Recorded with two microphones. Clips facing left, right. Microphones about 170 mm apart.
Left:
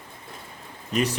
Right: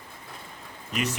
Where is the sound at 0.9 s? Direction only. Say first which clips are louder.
Left 5 dB; 35° left (ahead or behind).